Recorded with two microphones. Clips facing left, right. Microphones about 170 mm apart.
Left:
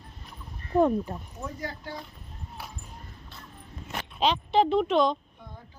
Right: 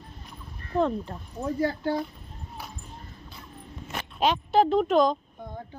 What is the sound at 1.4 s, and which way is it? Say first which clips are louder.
Speech: right 13 dB; 30° right (ahead or behind).